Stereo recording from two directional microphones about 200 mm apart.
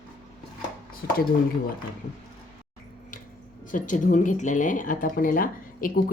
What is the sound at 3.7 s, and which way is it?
A woman's voice, 40° left (ahead or behind).